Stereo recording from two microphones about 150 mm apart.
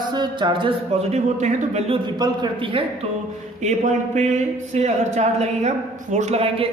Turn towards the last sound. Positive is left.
turn(degrees=-40)  # may be behind; listen again after turning